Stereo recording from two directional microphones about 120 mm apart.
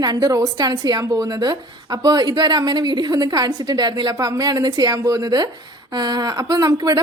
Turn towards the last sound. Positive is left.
turn(degrees=-30)  # may be behind; listen again after turning